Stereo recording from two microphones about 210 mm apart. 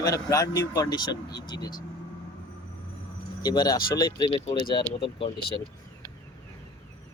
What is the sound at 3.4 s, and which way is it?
Speech, 20° left (ahead or behind).